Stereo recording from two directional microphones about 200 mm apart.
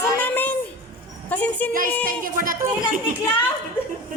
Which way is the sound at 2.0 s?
45° right (ahead or behind).